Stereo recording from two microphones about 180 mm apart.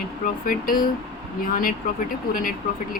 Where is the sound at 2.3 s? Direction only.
50° left (ahead or behind).